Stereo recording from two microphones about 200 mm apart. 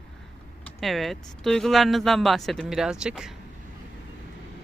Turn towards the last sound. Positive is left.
turn(degrees=-5)  # may be behind; listen again after turning